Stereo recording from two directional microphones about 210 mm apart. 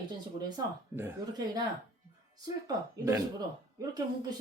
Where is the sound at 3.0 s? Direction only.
15° right (ahead or behind).